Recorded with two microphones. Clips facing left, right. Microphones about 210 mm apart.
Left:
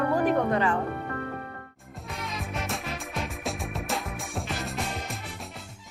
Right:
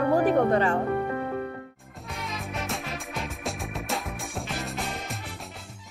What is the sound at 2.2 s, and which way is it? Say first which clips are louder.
Music: even; centre (ahead or behind).